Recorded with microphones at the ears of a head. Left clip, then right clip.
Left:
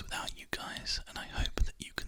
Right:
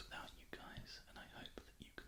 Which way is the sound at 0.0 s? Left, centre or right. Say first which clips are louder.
Left 13 dB; left.